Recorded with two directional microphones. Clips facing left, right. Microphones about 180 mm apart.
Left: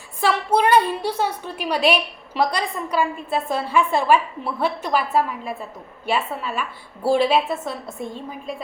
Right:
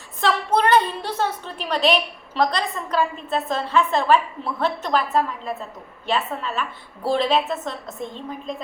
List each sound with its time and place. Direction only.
0.2 s a woman's voice: 10° left (ahead or behind)